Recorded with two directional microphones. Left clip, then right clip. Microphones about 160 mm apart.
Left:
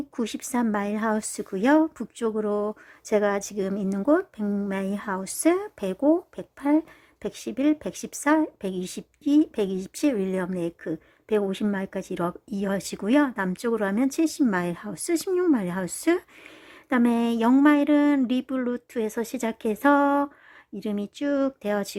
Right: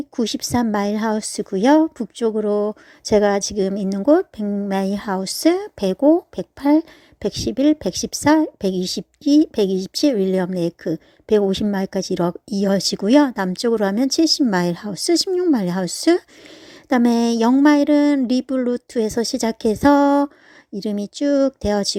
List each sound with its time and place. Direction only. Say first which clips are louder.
0.2 s a woman's voice: right 7 dB; 25° right (ahead or behind)
4.4 s speech: right 5 dB; 10° right (ahead or behind)
4.7 s a woman's voice: right 7 dB; 30° right (ahead or behind)
9.0 s a woman's voice: right 5 dB; centre (ahead or behind)
9.8 s a woman's voice: right 7 dB; 25° right (ahead or behind)